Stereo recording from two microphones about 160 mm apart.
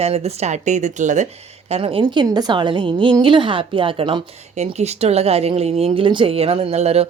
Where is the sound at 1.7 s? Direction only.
35° right (ahead or behind).